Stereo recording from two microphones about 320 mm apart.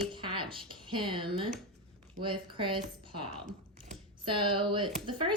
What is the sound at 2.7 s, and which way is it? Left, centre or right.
Speech, right.